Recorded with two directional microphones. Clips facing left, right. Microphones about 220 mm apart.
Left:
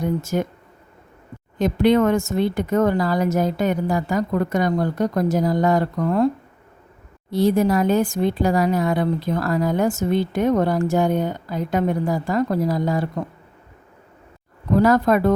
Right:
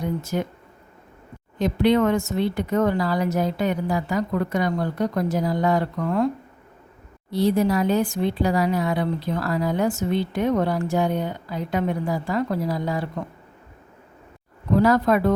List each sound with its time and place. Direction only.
0.0 s speech: 45° left (ahead or behind)
1.5 s speech: 45° left (ahead or behind)
7.3 s speech: 45° left (ahead or behind)
14.8 s speech: 45° left (ahead or behind)